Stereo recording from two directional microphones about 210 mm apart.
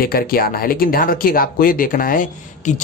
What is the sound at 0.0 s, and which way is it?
Speech, 45° left (ahead or behind).